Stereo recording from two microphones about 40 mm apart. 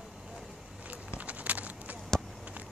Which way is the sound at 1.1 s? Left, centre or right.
Right.